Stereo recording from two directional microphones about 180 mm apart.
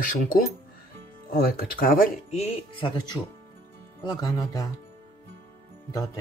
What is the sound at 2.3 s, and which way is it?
Speech, 35° left (ahead or behind).